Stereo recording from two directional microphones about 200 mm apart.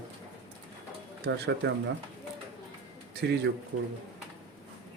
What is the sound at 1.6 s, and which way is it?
Speech, 60° right (ahead or behind).